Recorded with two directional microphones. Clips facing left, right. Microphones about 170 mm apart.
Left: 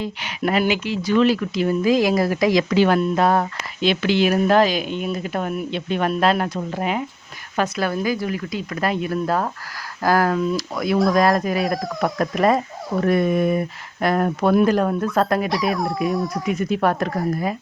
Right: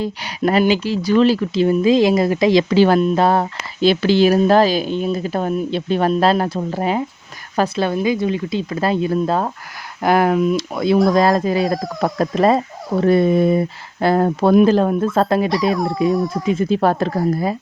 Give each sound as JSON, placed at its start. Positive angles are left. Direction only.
{"t": 0.0, "sound": "speech", "side_deg": -35}
{"t": 15.7, "sound": "speech", "side_deg": 0}
{"t": 16.5, "sound": "speech", "side_deg": -30}